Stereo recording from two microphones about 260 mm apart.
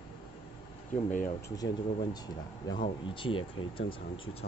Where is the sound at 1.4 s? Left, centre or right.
Centre.